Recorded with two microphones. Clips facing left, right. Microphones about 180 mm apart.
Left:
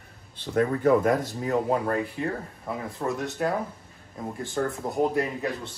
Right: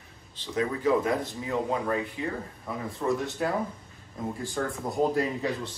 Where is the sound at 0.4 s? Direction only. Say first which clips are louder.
Left 5 dB; 55° left (ahead or behind).